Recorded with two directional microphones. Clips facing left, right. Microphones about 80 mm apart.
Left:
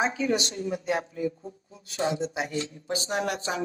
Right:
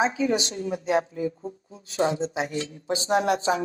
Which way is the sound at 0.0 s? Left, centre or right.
Right.